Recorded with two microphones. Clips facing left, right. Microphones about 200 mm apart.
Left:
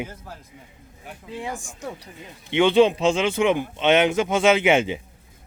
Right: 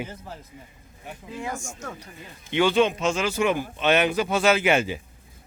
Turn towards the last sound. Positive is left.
turn(degrees=20)  # may be behind; listen again after turning